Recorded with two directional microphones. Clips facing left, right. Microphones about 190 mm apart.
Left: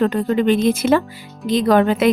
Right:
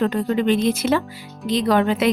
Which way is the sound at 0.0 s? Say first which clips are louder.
Left 3 dB; 50° left (ahead or behind).